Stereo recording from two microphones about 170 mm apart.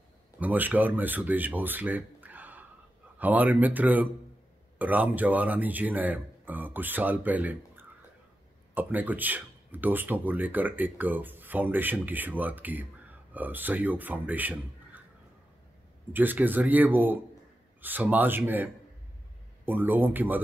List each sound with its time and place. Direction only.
0.4 s speech: 10° right (ahead or behind)
16.1 s speech: 10° right (ahead or behind)